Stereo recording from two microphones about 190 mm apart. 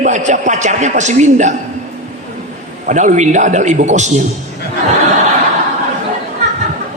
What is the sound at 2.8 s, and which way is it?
A man's voice, 40° right (ahead or behind).